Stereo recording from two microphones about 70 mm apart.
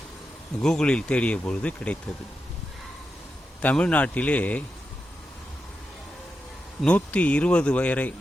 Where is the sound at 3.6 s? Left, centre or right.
Centre.